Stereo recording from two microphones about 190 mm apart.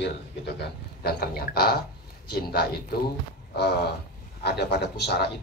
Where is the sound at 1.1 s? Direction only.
55° left (ahead or behind).